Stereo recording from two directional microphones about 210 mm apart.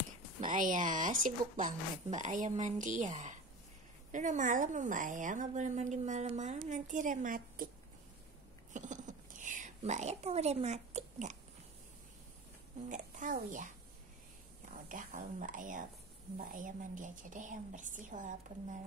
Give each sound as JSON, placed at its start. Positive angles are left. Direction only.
{"t": 0.4, "sound": "a woman's voice", "side_deg": -40}
{"t": 8.7, "sound": "a sound", "side_deg": -35}
{"t": 12.8, "sound": "a woman's voice", "side_deg": -40}
{"t": 14.9, "sound": "a woman's voice", "side_deg": -40}